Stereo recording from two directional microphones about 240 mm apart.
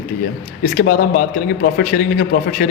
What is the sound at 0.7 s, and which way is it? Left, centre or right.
A man's voice, left.